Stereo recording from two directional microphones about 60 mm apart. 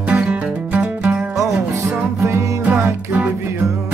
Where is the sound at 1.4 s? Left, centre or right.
Right.